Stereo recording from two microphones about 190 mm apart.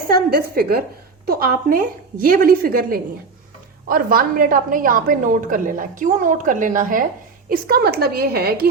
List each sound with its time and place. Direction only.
0.1 s a woman's voice: 50° right (ahead or behind)